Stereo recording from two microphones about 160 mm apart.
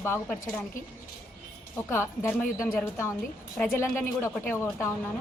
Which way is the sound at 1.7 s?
15° left (ahead or behind).